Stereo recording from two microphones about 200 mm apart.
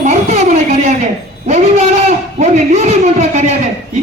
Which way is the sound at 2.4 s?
35° right (ahead or behind).